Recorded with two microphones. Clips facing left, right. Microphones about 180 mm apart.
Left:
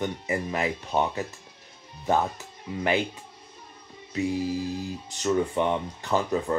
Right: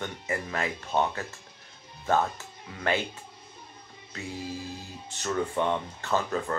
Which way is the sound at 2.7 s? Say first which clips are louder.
Left 3 dB; 15° left (ahead or behind).